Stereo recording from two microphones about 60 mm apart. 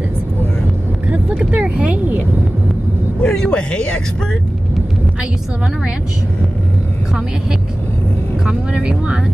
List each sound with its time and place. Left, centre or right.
1.1 s vehicle: right
3.2 s speech: centre
8.5 s speech: centre